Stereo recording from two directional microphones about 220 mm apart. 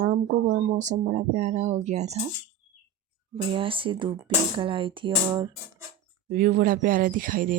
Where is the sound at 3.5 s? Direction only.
25° right (ahead or behind).